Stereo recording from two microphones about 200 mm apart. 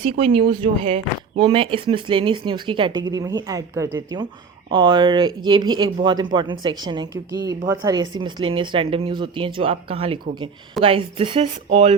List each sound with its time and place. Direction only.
0.0 s speech: 30° right (ahead or behind)